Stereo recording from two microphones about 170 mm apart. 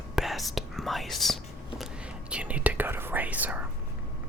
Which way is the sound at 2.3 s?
5° right (ahead or behind).